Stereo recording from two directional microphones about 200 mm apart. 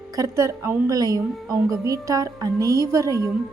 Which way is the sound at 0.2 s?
15° right (ahead or behind).